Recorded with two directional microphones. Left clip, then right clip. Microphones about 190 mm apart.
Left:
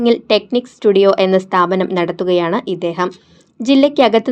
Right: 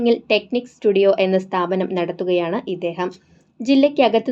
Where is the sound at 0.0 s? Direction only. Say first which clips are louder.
Left 4 dB; 30° left (ahead or behind).